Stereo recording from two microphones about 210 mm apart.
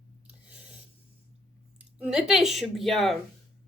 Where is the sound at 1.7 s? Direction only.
5° right (ahead or behind).